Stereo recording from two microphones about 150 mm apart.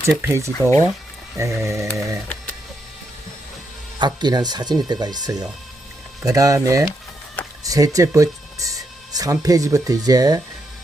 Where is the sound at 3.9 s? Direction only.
30° right (ahead or behind).